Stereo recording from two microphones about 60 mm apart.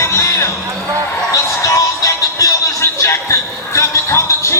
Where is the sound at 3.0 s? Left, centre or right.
Left.